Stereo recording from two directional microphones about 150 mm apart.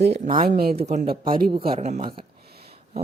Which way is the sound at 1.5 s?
35° right (ahead or behind).